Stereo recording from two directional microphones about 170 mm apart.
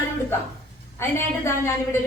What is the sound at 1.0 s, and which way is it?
A woman's voice, 15° left (ahead or behind).